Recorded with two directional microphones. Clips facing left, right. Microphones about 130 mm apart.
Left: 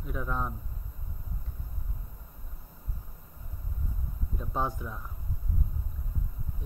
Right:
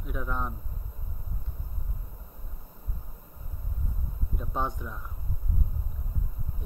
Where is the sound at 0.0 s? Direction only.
5° right (ahead or behind).